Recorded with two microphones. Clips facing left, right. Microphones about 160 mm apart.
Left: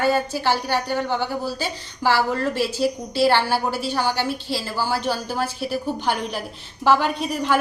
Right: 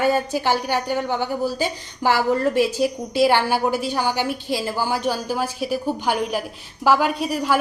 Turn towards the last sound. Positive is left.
turn(degrees=-5)  # may be behind; listen again after turning